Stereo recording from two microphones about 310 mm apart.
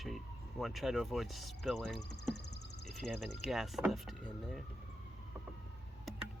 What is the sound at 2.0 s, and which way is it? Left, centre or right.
Speech, left.